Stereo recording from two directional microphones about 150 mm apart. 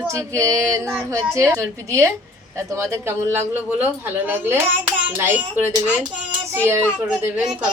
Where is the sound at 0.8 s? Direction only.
10° right (ahead or behind).